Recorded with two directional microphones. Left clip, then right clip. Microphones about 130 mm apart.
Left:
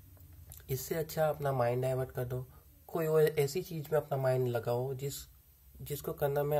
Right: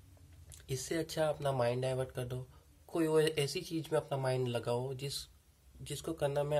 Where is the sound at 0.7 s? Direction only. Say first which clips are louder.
Left 1 dB; 20° right (ahead or behind).